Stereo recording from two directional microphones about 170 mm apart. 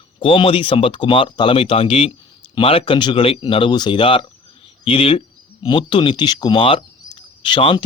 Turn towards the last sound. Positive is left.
turn(degrees=30)  # may be behind; listen again after turning